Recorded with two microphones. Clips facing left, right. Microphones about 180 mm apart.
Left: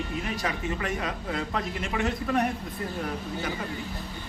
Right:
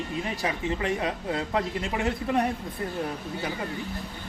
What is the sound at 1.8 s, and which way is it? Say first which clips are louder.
Speech: right 1 dB; 20° right (ahead or behind).